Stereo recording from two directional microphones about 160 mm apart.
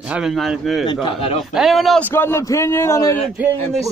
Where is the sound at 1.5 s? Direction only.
Centre (ahead or behind).